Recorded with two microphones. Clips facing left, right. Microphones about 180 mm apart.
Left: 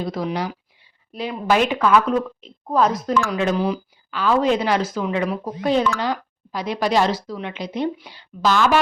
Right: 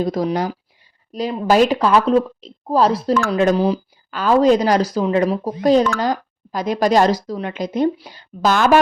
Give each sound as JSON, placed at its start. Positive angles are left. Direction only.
{"t": 0.0, "sound": "speech", "side_deg": -40}